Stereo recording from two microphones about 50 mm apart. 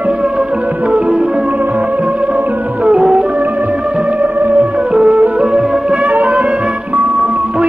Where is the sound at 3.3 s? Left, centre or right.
Right.